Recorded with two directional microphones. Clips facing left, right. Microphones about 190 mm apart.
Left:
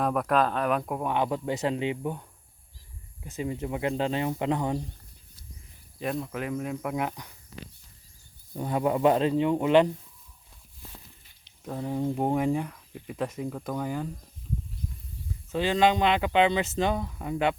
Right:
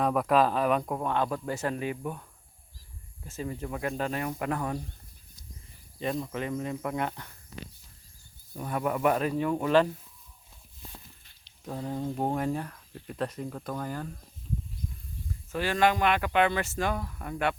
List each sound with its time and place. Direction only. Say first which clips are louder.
0.0 s speech: right 1 dB; centre (ahead or behind); by 2.2 s 20° left (ahead or behind)
3.2 s speech: left 3 dB; 15° left (ahead or behind)
6.0 s speech: even; centre (ahead or behind)
8.5 s speech: left 4 dB; 25° left (ahead or behind)
11.6 s speech: left 3 dB; 5° left (ahead or behind)
15.5 s speech: left 3 dB; 20° left (ahead or behind)